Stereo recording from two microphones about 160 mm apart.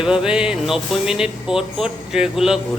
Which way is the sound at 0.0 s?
5° right (ahead or behind).